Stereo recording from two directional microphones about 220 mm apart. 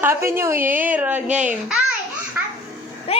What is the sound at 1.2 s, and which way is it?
Speech, 35° right (ahead or behind).